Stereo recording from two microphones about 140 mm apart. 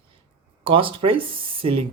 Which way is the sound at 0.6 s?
40° right (ahead or behind).